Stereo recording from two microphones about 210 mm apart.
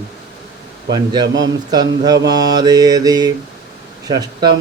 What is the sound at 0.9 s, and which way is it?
Speech, 20° right (ahead or behind).